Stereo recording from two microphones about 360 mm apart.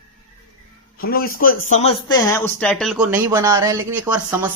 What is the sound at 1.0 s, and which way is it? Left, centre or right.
Speech, left.